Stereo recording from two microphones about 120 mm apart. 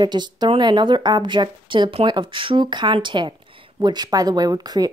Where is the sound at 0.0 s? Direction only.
35° right (ahead or behind).